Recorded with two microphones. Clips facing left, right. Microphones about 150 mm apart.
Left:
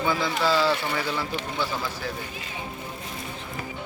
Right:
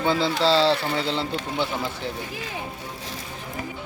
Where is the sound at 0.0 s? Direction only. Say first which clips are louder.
Right 3 dB; 25° right (ahead or behind).